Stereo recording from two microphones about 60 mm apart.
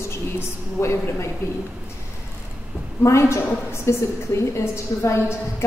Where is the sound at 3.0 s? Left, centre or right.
Left.